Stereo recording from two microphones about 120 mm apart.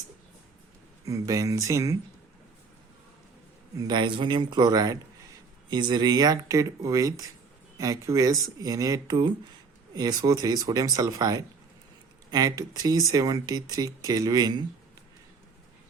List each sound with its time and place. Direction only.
1.0 s speech: 30° right (ahead or behind)
3.8 s speech: 35° right (ahead or behind)